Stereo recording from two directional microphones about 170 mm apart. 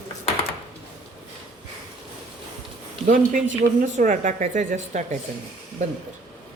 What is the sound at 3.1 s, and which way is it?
A woman's voice, 50° right (ahead or behind).